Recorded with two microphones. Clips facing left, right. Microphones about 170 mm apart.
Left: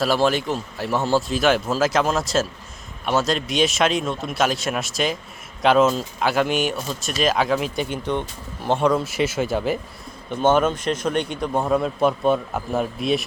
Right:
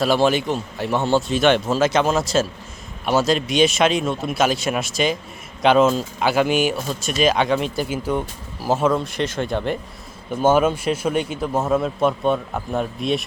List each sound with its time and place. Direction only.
0.0 s speech: centre (ahead or behind)
10.3 s speech: 10° right (ahead or behind)